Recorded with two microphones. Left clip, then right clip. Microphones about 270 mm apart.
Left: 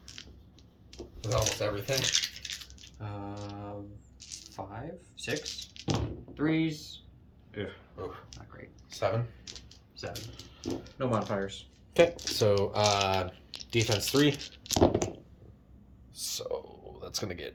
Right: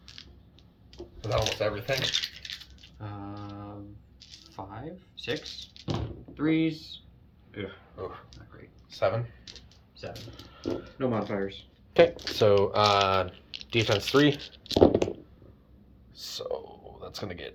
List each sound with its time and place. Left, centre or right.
0.2 s creak: centre
0.9 s typing: centre
1.3 s coin: centre
4.4 s speech: centre
9.5 s a sound: centre
10.6 s speech: left
11.9 s speech: centre
16.1 s a sound: centre